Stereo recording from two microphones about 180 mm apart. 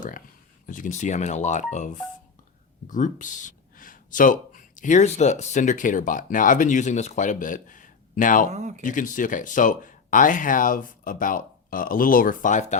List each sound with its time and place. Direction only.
0.7 s speech: 45° left (ahead or behind)
8.4 s speech: 40° right (ahead or behind)
8.8 s speech: 45° left (ahead or behind)